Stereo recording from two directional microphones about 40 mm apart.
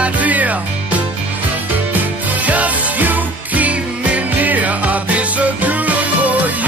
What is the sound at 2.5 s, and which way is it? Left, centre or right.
Music, right.